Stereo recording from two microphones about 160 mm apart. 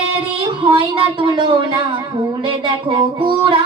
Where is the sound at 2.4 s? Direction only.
30° right (ahead or behind).